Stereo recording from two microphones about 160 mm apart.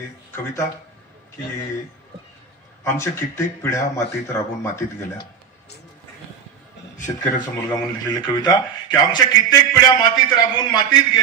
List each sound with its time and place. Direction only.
2.8 s speech: 15° left (ahead or behind)
7.3 s speech: 25° left (ahead or behind)